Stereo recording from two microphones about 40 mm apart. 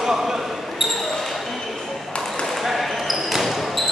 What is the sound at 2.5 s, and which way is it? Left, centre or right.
Basketball bounce, centre.